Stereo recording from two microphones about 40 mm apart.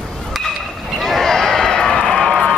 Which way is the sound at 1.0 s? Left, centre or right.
Centre.